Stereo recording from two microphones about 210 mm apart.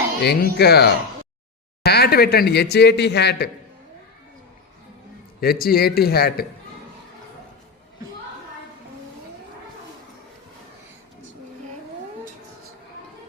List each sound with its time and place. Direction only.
0.2 s speech: 50° left (ahead or behind)
5.4 s speech: 45° left (ahead or behind)